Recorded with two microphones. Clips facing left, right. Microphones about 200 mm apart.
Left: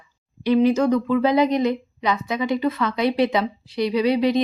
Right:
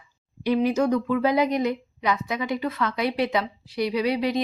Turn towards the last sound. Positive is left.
turn(degrees=-5)  # may be behind; listen again after turning